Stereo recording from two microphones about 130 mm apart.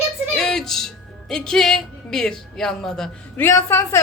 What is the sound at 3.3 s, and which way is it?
Speech, 20° left (ahead or behind).